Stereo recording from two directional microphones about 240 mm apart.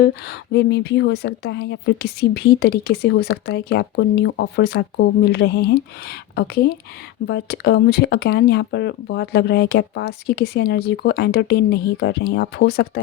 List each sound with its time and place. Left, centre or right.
0.5 s speech: left